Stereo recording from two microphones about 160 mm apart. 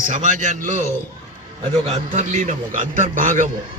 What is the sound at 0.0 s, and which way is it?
A man's voice, 50° right (ahead or behind).